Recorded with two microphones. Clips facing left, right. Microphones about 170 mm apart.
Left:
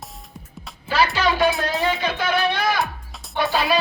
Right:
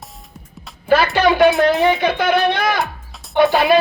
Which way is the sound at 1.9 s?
55° right (ahead or behind).